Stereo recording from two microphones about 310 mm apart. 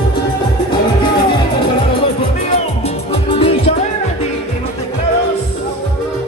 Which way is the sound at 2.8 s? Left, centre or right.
Centre.